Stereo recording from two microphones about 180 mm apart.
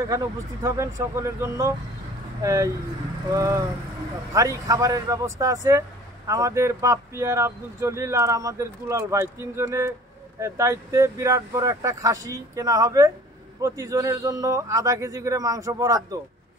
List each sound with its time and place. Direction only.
0.1 s speech: 20° right (ahead or behind)